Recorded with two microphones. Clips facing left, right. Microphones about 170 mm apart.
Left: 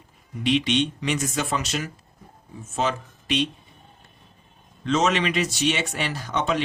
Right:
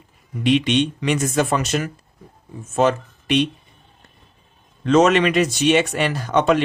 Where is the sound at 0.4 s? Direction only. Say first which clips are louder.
Right 4 dB; 55° right (ahead or behind).